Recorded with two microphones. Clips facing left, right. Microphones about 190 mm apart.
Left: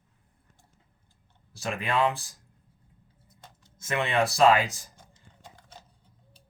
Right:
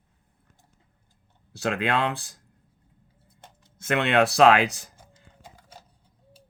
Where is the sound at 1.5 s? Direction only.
70° right (ahead or behind).